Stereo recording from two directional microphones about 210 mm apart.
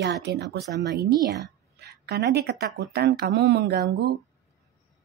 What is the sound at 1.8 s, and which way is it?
Speech, 50° right (ahead or behind).